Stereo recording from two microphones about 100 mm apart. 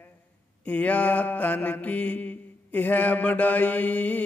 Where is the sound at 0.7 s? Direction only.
15° left (ahead or behind).